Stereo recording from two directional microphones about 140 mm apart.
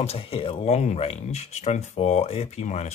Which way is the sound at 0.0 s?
45° left (ahead or behind).